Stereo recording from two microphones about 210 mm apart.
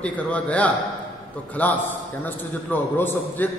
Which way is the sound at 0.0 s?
5° left (ahead or behind).